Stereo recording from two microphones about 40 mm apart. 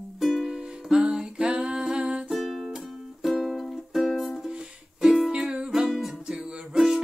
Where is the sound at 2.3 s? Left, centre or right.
Centre.